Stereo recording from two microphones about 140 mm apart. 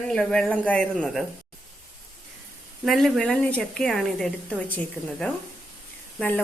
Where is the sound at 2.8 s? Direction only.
Centre (ahead or behind).